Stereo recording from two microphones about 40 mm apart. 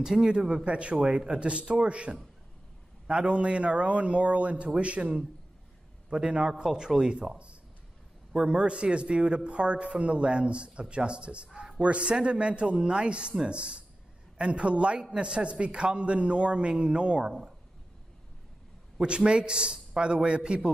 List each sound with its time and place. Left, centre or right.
0.0 s speech: centre
17.3 s speech: centre
19.0 s speech: right